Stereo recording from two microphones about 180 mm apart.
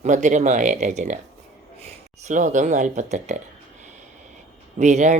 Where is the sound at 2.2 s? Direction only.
45° right (ahead or behind).